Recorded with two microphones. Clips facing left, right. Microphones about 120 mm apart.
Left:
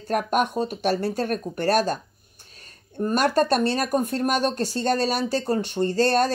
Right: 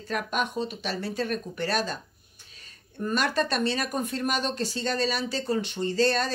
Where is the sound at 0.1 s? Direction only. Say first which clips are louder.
Left 6 dB; 50° left (ahead or behind).